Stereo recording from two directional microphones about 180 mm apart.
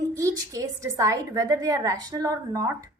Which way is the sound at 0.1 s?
15° right (ahead or behind).